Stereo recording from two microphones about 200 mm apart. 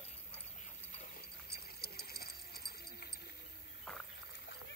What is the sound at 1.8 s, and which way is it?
Bird, 50° left (ahead or behind).